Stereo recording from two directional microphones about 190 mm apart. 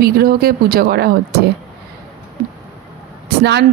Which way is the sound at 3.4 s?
60° right (ahead or behind).